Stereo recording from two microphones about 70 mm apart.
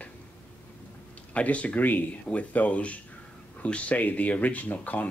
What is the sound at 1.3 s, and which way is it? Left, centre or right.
Speech, centre.